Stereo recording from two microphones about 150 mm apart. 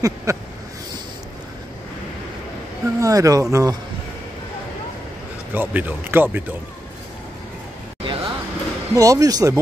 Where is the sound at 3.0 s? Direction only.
20° right (ahead or behind).